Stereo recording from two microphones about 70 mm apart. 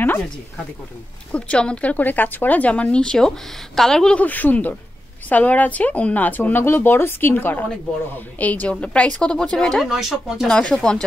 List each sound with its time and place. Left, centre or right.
1.3 s speech: centre
4.2 s speech: left; by 9.8 s centre
9.8 s speech: centre
10.5 s speech: centre